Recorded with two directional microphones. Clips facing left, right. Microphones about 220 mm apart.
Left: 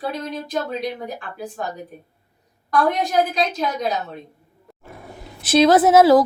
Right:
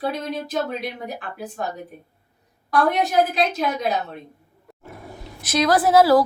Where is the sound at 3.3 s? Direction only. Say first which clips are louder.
Even; centre (ahead or behind).